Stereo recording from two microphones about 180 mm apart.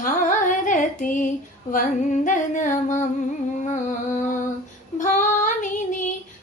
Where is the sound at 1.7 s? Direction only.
50° left (ahead or behind).